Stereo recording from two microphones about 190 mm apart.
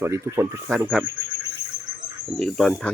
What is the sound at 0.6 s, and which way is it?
Speech, 5° right (ahead or behind).